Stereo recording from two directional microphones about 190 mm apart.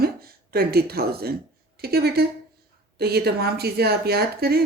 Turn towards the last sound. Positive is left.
turn(degrees=-55)  # may be behind; listen again after turning